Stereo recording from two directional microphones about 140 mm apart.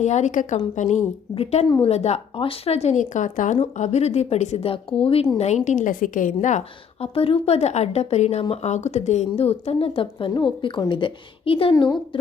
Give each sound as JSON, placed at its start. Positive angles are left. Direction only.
{"t": 0.0, "sound": "a woman's voice", "side_deg": 55}
{"t": 3.6, "sound": "speech", "side_deg": 50}
{"t": 5.4, "sound": "a woman's voice", "side_deg": 55}
{"t": 7.0, "sound": "speech", "side_deg": 40}
{"t": 11.7, "sound": "a woman's voice", "side_deg": 30}